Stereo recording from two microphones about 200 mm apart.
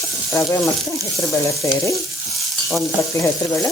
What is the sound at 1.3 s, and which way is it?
Sizzle, 15° left (ahead or behind).